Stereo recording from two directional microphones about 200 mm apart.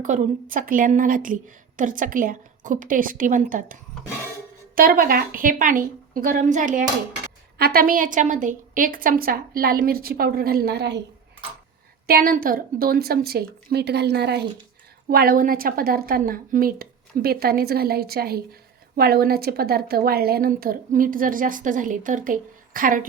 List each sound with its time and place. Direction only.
0.0 s a woman's voice: 40° right (ahead or behind); by 11.0 s 55° right (ahead or behind)
12.0 s a woman's voice: 45° right (ahead or behind)